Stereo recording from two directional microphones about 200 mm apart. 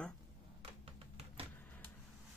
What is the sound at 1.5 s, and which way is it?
Vehicle, 10° left (ahead or behind).